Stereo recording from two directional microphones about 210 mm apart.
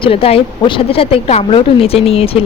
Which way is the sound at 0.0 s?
25° left (ahead or behind).